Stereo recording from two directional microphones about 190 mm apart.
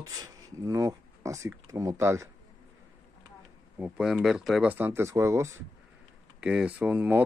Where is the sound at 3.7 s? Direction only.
5° right (ahead or behind).